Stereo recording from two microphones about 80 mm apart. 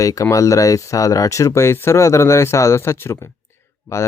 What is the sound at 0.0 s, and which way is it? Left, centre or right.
Speech, left.